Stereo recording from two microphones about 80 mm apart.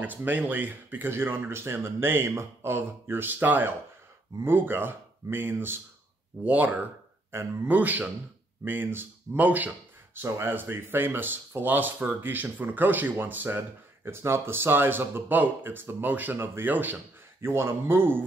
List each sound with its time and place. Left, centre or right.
0.0 s speech: right
7.2 s speech: right
7.6 s speech: right
17.5 s speech: right